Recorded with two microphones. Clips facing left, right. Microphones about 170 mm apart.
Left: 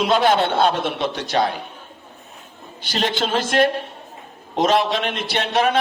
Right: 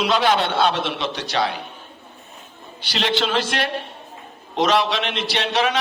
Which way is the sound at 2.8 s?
50° left (ahead or behind).